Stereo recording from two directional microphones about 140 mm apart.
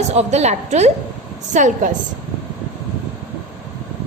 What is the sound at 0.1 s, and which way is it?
Speech, 50° right (ahead or behind).